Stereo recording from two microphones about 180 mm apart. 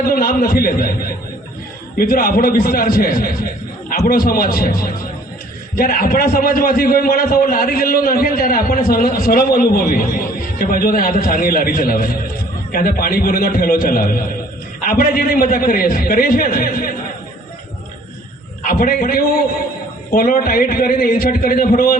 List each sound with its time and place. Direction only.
0.0 s a man's voice: 55° left (ahead or behind)
2.0 s a man's voice: 55° left (ahead or behind)
18.7 s a man's voice: 50° left (ahead or behind)